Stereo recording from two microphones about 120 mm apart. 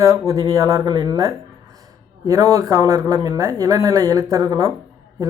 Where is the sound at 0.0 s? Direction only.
30° right (ahead or behind).